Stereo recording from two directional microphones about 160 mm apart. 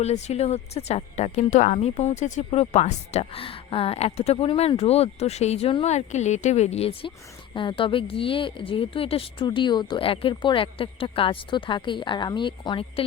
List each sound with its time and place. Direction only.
0.0 s speech: 45° left (ahead or behind)